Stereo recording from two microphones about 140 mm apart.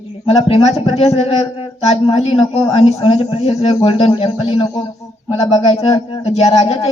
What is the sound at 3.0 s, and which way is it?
Speech, 45° left (ahead or behind).